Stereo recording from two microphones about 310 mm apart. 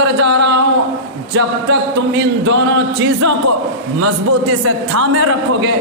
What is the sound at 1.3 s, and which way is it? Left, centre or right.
Speech, right.